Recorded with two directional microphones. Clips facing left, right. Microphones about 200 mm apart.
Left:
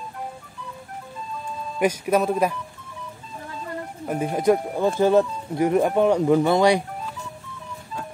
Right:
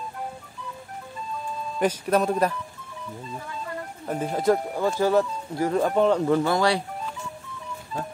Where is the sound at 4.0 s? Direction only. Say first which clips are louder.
Left 3 dB; 10° left (ahead or behind).